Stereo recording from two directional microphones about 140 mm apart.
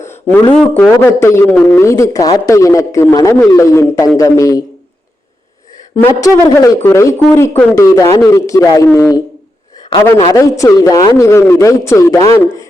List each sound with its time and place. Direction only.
0.0 s a sound: 15° left (ahead or behind)
0.6 s speech: 10° left (ahead or behind)
6.0 s a man's voice: 25° left (ahead or behind)
7.9 s speech: 25° left (ahead or behind)
10.3 s speech: 20° left (ahead or behind)